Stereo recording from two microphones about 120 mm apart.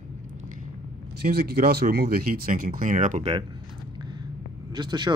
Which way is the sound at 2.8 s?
90° right.